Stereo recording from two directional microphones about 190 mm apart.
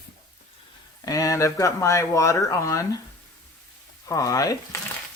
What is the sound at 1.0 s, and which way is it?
Speech, 15° left (ahead or behind).